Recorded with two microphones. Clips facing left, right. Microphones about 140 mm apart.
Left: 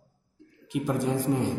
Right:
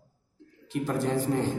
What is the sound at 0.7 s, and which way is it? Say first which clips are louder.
Speech: left 1 dB; 15° left (ahead or behind).